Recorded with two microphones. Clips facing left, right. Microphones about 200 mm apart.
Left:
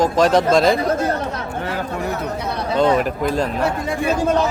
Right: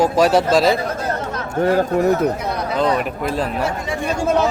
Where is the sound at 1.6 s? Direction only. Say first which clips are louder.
Right 11 dB; 40° right (ahead or behind).